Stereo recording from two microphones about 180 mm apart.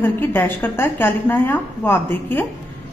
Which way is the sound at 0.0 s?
10° left (ahead or behind).